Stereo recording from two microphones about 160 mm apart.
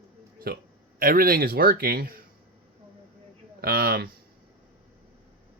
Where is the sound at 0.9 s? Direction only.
65° right (ahead or behind).